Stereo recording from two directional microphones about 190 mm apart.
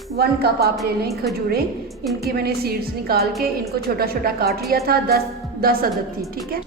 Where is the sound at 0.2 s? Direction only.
55° right (ahead or behind).